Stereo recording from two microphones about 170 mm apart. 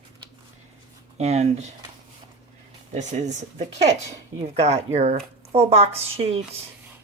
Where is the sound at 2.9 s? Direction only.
45° right (ahead or behind).